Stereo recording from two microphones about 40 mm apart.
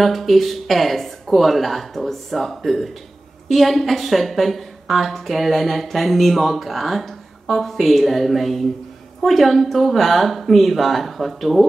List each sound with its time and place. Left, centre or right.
0.0 s a woman's voice: centre